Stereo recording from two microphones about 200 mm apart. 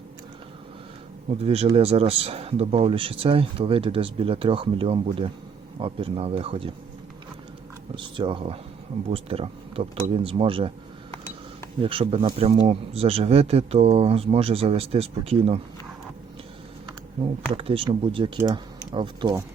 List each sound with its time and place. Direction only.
1.3 s speech: 30° right (ahead or behind)
7.9 s speech: 25° right (ahead or behind)
11.8 s speech: 25° right (ahead or behind)
17.5 s speech: 25° right (ahead or behind)